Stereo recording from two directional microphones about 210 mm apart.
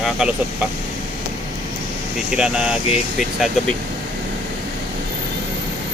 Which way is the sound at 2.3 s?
5° right (ahead or behind).